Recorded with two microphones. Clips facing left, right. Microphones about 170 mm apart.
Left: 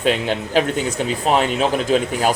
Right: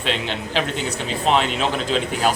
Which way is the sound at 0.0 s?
45° left (ahead or behind).